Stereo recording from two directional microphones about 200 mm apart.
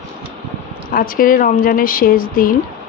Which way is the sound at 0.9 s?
45° left (ahead or behind).